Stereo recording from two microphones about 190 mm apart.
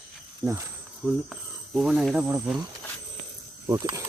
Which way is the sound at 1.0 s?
5° right (ahead or behind).